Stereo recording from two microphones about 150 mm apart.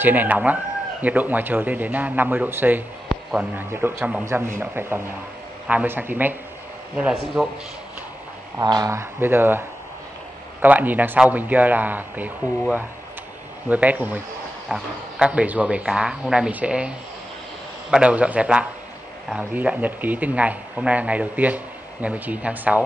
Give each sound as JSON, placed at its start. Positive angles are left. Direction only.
{"t": 0.0, "sound": "speech", "side_deg": -10}
{"t": 8.5, "sound": "speech", "side_deg": -25}
{"t": 13.7, "sound": "speech", "side_deg": -10}
{"t": 17.9, "sound": "speech", "side_deg": -10}